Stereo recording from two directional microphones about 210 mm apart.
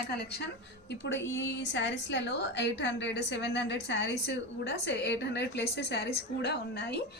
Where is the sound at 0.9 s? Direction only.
55° left (ahead or behind).